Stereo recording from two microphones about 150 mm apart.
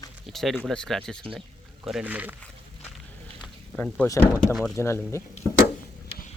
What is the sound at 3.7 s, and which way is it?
Speech, 10° left (ahead or behind).